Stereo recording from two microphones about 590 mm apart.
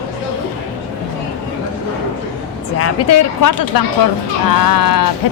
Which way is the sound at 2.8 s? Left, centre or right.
Left.